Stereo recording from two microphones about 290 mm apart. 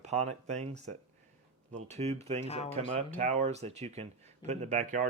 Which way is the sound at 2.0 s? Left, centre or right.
Right.